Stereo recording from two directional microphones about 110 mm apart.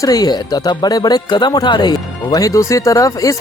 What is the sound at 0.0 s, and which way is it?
Speech, 35° left (ahead or behind).